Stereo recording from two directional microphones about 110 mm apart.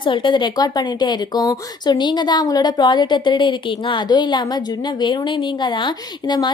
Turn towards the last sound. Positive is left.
turn(degrees=45)  # may be behind; listen again after turning